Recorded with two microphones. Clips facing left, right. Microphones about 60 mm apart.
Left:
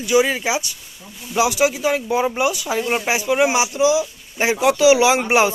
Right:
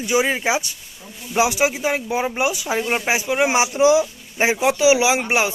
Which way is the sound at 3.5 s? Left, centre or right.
Right.